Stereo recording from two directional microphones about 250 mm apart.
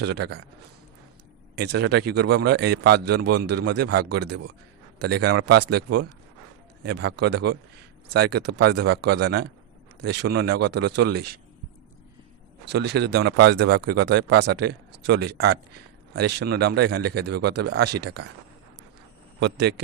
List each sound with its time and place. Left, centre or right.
0.0 s a man's voice: right
1.5 s a man's voice: right
6.8 s a man's voice: right
12.6 s a man's voice: right
19.4 s a man's voice: right